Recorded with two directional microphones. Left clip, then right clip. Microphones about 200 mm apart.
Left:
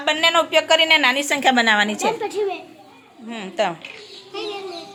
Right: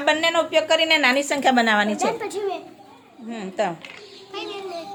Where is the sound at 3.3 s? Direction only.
5° right (ahead or behind).